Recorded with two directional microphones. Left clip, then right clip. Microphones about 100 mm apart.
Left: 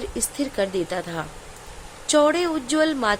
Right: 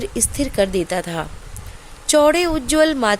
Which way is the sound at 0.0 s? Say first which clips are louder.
Right 5 dB; 90° right.